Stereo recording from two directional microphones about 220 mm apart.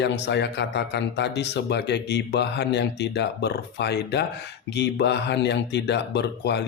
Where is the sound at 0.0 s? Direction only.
50° left (ahead or behind).